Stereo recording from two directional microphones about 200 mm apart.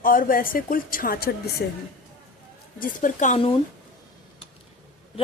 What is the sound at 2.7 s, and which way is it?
Speech, 40° left (ahead or behind).